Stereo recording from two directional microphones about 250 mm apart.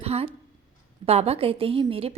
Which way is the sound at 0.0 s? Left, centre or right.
Right.